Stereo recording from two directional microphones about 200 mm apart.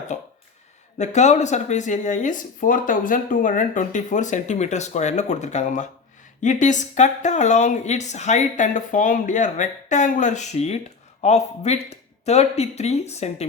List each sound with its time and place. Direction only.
0.1 s speech: 35° left (ahead or behind)